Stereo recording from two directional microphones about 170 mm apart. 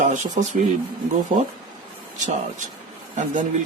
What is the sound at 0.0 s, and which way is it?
Speech, 50° right (ahead or behind).